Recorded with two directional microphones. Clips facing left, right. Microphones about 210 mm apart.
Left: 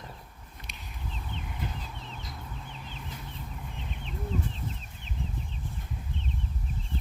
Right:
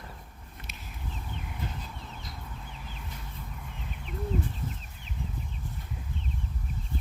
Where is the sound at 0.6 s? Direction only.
Centre (ahead or behind).